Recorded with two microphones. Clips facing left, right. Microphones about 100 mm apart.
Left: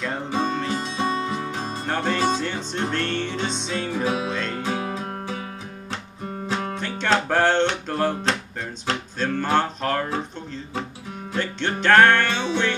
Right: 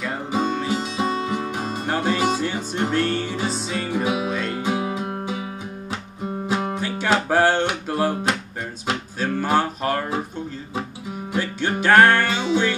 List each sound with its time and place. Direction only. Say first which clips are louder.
0.0 s music: right 1 dB; 5° right (ahead or behind)
11.3 s music: right 2 dB; 10° right (ahead or behind)